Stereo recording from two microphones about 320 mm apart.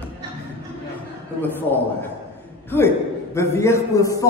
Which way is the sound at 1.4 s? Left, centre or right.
Centre.